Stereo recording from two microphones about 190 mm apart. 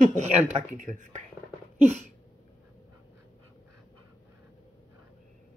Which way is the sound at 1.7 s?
35° right (ahead or behind).